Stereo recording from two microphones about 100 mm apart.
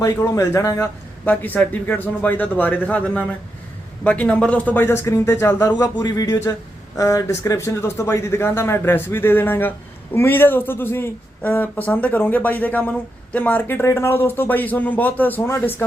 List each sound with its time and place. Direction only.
0.0 s speech: 30° left (ahead or behind)
1.2 s a man's voice: 20° left (ahead or behind)